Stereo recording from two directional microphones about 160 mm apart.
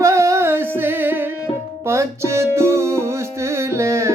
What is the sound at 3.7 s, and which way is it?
Carnatic music, 15° right (ahead or behind).